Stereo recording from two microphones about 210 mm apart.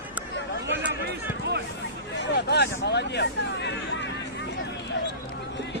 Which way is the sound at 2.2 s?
55° left (ahead or behind).